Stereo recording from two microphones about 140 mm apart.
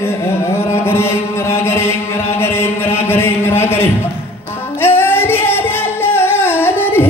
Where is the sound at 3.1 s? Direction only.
15° left (ahead or behind).